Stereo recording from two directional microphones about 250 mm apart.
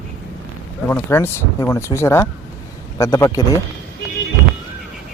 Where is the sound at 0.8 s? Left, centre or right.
Centre.